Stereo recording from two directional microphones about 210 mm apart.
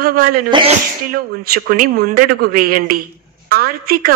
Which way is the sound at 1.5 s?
45° right (ahead or behind).